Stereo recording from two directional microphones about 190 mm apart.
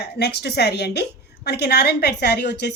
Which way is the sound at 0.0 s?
60° left (ahead or behind).